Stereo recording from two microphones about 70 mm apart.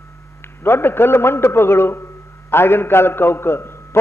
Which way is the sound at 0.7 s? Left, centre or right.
Left.